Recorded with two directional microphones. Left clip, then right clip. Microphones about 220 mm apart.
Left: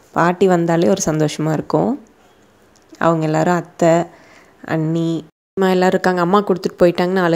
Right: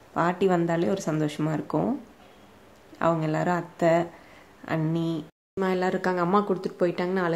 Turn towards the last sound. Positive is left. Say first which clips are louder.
# left 11 dB
turn(degrees=35)  # may be behind; listen again after turning